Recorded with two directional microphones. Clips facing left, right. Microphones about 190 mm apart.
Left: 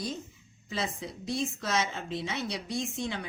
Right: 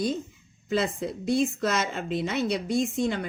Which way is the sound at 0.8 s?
55° right (ahead or behind).